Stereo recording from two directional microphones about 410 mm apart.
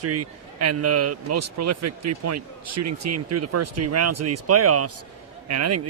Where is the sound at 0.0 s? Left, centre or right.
Right.